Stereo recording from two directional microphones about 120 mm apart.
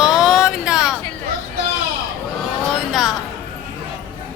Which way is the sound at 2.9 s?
Centre (ahead or behind).